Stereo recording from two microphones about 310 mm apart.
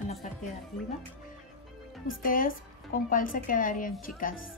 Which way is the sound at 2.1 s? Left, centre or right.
Left.